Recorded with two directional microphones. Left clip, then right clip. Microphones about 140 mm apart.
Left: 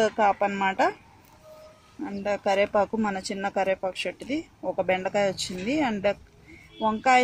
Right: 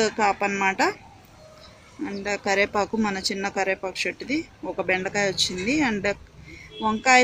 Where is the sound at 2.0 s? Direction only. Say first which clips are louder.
Even; 70° left (ahead or behind).